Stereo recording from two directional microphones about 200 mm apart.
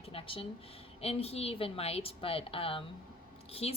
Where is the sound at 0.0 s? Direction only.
30° left (ahead or behind).